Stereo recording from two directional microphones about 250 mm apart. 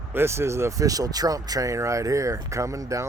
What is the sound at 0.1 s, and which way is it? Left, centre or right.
Speech, centre.